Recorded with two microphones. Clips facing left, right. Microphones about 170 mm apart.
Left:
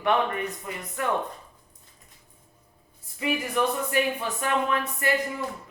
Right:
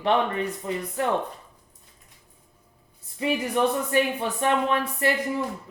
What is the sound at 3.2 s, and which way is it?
Speech, 30° right (ahead or behind).